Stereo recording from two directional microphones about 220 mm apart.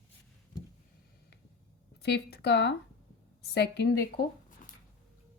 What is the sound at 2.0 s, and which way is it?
Speech, 50° left (ahead or behind).